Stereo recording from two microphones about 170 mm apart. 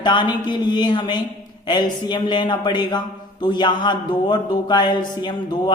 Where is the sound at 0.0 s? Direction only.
25° left (ahead or behind).